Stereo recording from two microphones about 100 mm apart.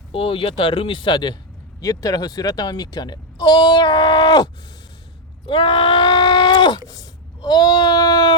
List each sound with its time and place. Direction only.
0.1 s speech: 65° left (ahead or behind)
1.8 s speech: 35° left (ahead or behind)
5.5 s a sound: 55° left (ahead or behind)